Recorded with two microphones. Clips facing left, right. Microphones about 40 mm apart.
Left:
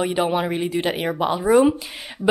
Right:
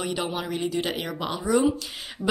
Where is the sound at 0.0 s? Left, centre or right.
Left.